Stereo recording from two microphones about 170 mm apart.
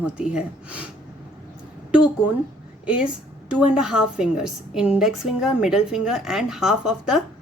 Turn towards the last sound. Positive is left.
turn(degrees=-5)  # may be behind; listen again after turning